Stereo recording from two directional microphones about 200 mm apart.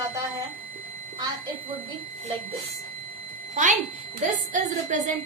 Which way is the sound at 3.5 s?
40° right (ahead or behind).